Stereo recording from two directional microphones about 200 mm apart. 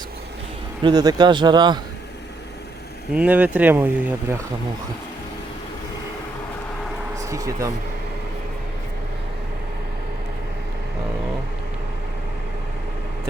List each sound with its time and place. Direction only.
0.9 s speech: 20° right (ahead or behind)
3.1 s speech: 5° right (ahead or behind)
7.2 s speech: 15° right (ahead or behind)